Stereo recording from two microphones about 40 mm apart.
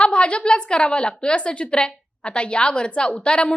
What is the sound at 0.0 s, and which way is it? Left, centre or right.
A woman's voice, left.